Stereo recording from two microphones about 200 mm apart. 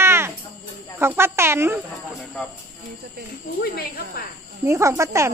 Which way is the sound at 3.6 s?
50° left (ahead or behind).